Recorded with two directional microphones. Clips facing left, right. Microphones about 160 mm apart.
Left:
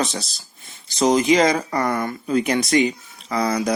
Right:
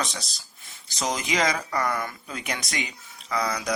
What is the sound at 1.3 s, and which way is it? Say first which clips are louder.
Speech: left 8 dB; 35° left (ahead or behind).